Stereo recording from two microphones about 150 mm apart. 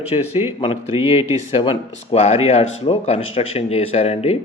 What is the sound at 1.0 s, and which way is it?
Speech, 20° right (ahead or behind).